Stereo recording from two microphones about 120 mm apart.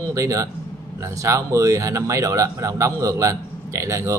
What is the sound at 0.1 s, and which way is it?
Speech, 25° right (ahead or behind).